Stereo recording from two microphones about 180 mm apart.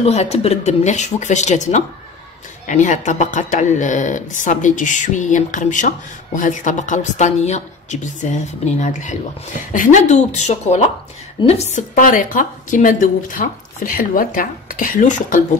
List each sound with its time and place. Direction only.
0.0 s speech: 35° left (ahead or behind)